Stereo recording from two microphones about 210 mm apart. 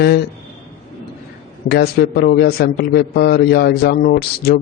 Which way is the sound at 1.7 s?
50° left (ahead or behind).